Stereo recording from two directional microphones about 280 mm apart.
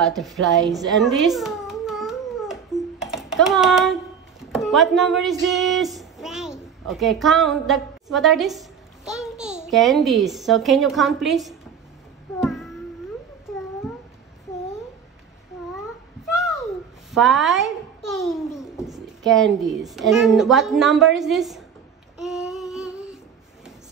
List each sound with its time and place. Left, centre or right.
0.2 s a sound: centre
4.5 s a child's voice: centre
12.4 s cat: centre
17.1 s babbling: centre
18.9 s a woman's voice: centre
22.2 s child singing: centre